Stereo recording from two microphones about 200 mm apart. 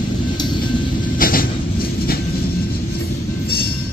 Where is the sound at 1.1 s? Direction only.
45° left (ahead or behind).